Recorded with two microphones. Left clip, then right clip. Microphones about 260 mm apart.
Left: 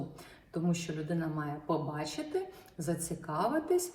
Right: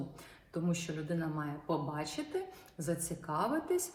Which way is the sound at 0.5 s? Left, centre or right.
Centre.